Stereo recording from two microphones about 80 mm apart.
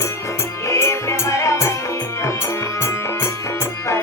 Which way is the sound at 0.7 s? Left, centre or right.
Left.